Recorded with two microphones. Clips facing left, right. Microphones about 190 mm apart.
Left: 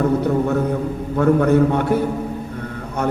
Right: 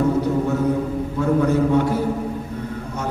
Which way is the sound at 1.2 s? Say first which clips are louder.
Left 4 dB; 60° left (ahead or behind).